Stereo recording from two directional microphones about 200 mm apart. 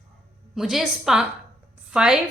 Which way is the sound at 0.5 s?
Centre (ahead or behind).